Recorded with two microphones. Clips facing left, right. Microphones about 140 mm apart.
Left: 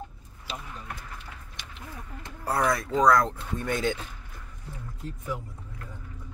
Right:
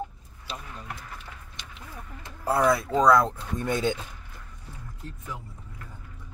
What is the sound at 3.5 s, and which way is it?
Speech, 15° right (ahead or behind).